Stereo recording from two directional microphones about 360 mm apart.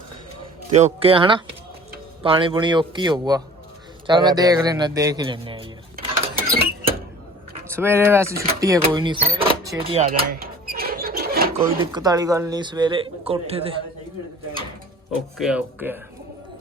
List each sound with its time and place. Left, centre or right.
0.7 s a man's voice: centre
7.7 s speech: centre
9.2 s a sound: centre
11.8 s speech: centre
15.4 s speech: centre